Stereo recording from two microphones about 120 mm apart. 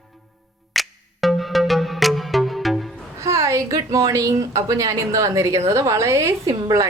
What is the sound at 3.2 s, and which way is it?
Speech, 25° right (ahead or behind).